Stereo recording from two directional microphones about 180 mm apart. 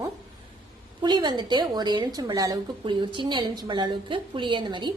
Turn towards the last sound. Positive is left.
turn(degrees=-25)  # may be behind; listen again after turning